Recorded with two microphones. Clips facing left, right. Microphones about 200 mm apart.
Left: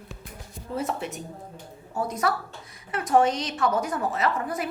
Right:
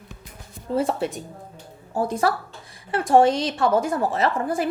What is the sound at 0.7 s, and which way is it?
A woman's voice, 30° right (ahead or behind).